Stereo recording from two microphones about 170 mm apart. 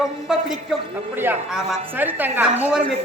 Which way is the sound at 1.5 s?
Centre (ahead or behind).